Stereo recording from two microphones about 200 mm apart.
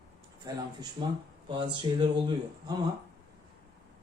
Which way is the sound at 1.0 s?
25° right (ahead or behind).